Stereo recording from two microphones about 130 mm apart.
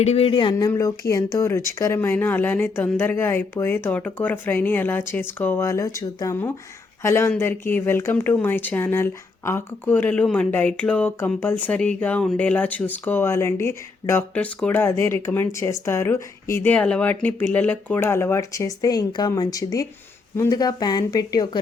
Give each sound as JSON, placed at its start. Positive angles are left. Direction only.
{"t": 0.0, "sound": "speech", "side_deg": 50}
{"t": 0.6, "sound": "speech", "side_deg": 25}
{"t": 16.7, "sound": "speech", "side_deg": 10}